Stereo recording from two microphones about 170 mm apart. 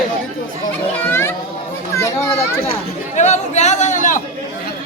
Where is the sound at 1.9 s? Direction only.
15° left (ahead or behind).